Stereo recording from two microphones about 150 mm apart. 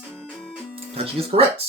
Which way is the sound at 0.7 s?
40° right (ahead or behind).